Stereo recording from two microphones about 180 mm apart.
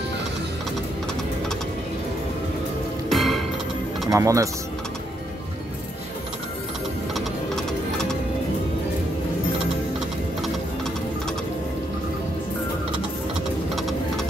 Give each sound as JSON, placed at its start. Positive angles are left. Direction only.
{"t": 3.1, "sound": "music", "side_deg": 0}
{"t": 4.1, "sound": "speech", "side_deg": -20}
{"t": 7.2, "sound": "music", "side_deg": 5}
{"t": 13.7, "sound": "music", "side_deg": 0}